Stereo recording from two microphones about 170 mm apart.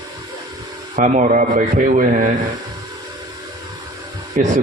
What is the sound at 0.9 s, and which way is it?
Speech, 50° right (ahead or behind).